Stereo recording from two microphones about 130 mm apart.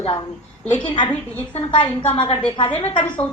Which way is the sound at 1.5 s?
35° left (ahead or behind).